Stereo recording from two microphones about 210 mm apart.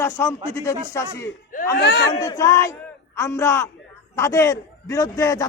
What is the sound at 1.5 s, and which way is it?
Speech, 45° left (ahead or behind).